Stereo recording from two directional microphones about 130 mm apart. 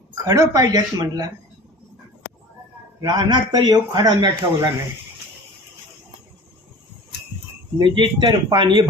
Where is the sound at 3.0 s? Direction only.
30° right (ahead or behind).